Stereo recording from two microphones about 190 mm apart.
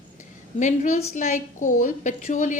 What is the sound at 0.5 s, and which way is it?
Speech, 40° left (ahead or behind).